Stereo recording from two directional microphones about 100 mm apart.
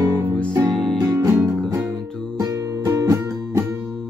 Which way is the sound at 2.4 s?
35° right (ahead or behind).